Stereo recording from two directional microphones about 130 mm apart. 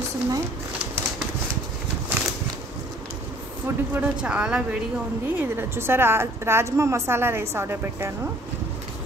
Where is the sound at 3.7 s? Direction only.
20° right (ahead or behind).